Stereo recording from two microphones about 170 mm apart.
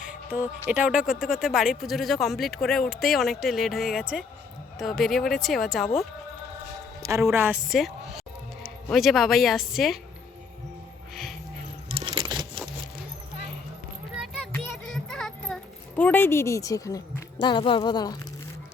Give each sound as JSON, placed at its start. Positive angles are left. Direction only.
{"t": 0.0, "sound": "music", "side_deg": -5}
{"t": 0.7, "sound": "speech", "side_deg": -5}
{"t": 7.0, "sound": "speech", "side_deg": -15}
{"t": 7.7, "sound": "a woman's voice", "side_deg": 0}
{"t": 11.1, "sound": "music", "side_deg": 0}
{"t": 11.9, "sound": "keys jangling", "side_deg": -30}
{"t": 14.7, "sound": "a sound", "side_deg": 0}
{"t": 17.4, "sound": "speech", "side_deg": 30}